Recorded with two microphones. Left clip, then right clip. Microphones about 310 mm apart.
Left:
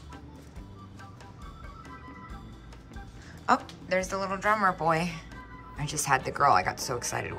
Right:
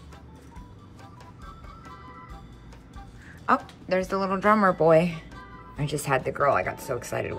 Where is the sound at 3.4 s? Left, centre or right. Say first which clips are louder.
Right 2 dB; centre.